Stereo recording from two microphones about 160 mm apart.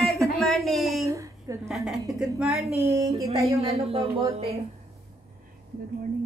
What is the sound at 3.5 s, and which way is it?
Speech, 40° right (ahead or behind).